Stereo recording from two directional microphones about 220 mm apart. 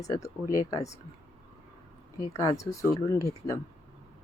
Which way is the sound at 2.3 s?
15° left (ahead or behind).